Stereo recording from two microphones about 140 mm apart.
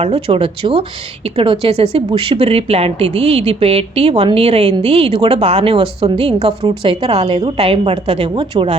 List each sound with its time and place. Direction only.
0.0 s a woman's voice: 40° right (ahead or behind)